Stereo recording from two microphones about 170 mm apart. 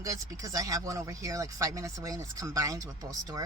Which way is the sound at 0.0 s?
20° right (ahead or behind).